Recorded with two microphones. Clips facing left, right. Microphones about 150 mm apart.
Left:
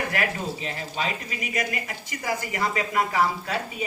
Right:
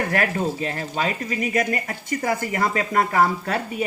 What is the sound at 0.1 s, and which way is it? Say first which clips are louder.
Speech: right 5 dB; 45° right (ahead or behind).